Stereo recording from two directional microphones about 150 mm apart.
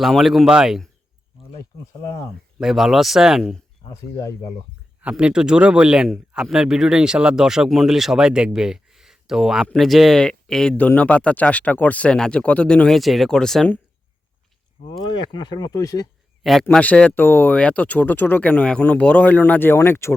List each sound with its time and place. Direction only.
0.0 s a man's voice: centre (ahead or behind)
1.5 s speech: 20° left (ahead or behind)
2.6 s a man's voice: centre (ahead or behind)
3.8 s speech: 20° left (ahead or behind)
5.0 s a man's voice: 5° right (ahead or behind)
15.0 s speech: 30° left (ahead or behind)
16.4 s a man's voice: centre (ahead or behind); by 20.1 s 15° left (ahead or behind)